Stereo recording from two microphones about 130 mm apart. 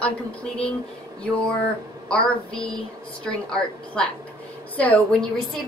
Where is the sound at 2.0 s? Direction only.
5° left (ahead or behind).